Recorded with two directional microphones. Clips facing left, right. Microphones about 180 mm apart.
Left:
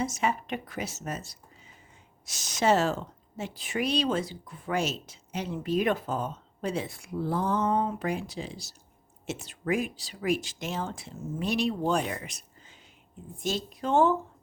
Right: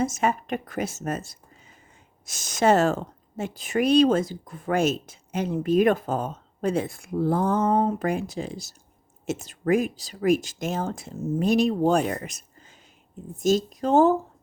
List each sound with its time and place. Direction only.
0.0 s speech: 50° right (ahead or behind)